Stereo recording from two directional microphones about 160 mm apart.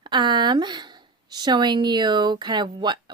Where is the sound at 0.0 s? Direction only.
30° right (ahead or behind).